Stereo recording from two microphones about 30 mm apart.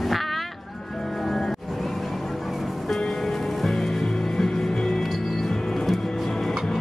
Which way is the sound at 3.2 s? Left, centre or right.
Centre.